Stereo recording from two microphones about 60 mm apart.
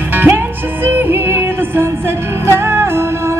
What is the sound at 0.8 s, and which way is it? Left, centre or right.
Music, right.